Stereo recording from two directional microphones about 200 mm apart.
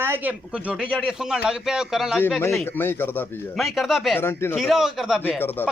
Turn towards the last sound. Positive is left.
turn(degrees=10)  # may be behind; listen again after turning